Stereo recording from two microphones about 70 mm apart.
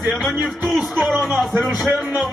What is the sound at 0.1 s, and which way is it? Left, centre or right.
Speech, centre.